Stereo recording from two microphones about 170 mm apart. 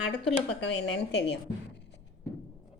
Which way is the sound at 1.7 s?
90° left.